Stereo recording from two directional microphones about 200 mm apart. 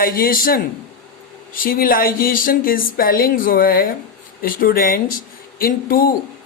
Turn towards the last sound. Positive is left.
turn(degrees=45)  # may be behind; listen again after turning